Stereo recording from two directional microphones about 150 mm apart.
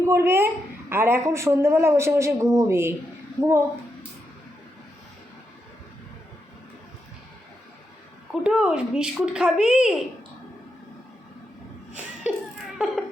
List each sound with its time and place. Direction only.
0.0 s a woman's voice: 15° right (ahead or behind)
8.3 s speech: 5° right (ahead or behind)
12.2 s laughter: 5° right (ahead or behind)